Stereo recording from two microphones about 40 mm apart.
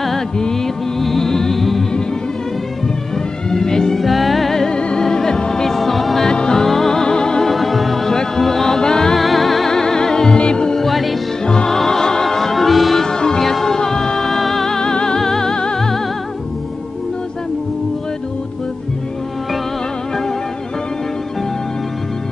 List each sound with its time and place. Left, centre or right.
0.4 s music: centre
3.4 s music: centre
4.0 s music: centre
4.6 s music: left; by 6.2 s centre
6.2 s music: centre
7.5 s music: centre
9.1 s music: centre
10.8 s music: centre
11.4 s music: left
11.7 s music: centre
13.0 s music: centre